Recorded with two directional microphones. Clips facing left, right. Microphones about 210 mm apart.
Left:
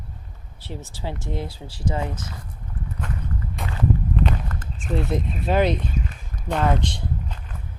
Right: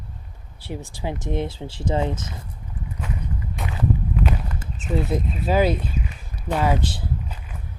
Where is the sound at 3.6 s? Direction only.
5° right (ahead or behind).